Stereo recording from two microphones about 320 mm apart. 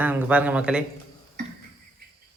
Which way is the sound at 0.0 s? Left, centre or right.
Centre.